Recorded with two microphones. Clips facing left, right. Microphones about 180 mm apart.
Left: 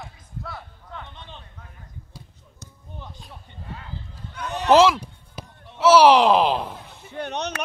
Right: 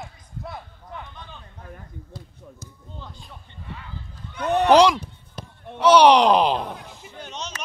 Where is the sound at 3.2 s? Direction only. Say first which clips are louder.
Left 1 dB; 5° left (ahead or behind).